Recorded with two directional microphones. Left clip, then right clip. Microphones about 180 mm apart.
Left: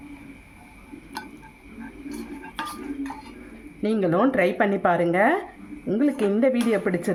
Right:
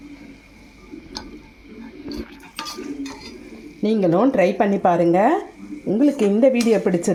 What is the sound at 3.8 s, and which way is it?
Speech, 20° right (ahead or behind).